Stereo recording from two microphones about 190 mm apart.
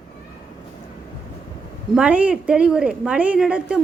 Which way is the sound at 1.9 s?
5° right (ahead or behind).